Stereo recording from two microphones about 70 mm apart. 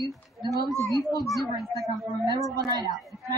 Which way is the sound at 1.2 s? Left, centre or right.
Centre.